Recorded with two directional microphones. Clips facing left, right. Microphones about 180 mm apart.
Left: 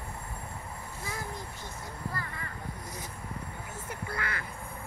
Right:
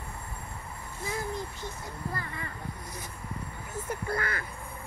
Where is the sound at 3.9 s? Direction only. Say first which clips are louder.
Right 5 dB; 45° right (ahead or behind).